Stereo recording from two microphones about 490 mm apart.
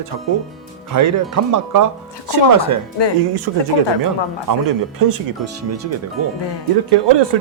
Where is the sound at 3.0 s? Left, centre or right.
Left.